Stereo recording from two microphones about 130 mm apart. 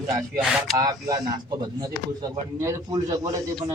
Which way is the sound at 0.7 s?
30° right (ahead or behind).